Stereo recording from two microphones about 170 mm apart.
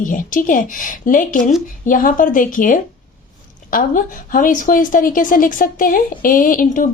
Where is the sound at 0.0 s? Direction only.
50° left (ahead or behind).